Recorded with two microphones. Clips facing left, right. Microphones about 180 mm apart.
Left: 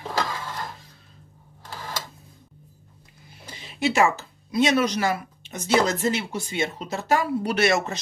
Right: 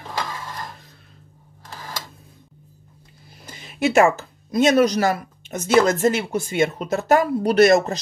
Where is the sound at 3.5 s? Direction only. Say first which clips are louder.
Right 3 dB; 50° right (ahead or behind).